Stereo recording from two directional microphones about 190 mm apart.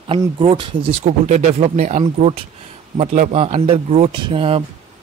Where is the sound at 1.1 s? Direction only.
40° right (ahead or behind).